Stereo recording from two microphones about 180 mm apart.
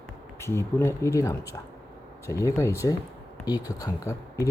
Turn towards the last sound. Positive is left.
turn(degrees=20)  # may be behind; listen again after turning